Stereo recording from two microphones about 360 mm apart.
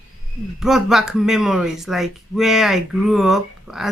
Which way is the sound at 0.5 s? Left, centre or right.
Centre.